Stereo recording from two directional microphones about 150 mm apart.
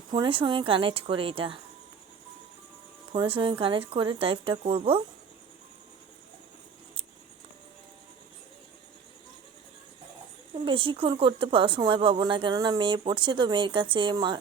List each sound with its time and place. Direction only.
0.1 s speech: 35° right (ahead or behind)
3.1 s speech: 35° right (ahead or behind)
10.5 s speech: 35° right (ahead or behind)